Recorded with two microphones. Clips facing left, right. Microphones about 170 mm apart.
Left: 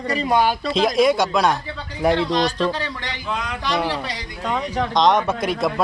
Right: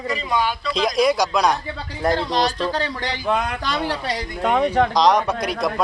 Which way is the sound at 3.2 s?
55° right (ahead or behind).